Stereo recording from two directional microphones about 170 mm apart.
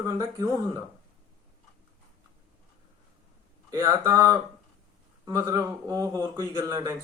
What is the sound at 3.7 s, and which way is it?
Speech, 20° right (ahead or behind).